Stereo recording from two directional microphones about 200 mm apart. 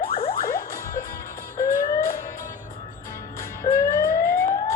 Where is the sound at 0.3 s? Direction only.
15° left (ahead or behind).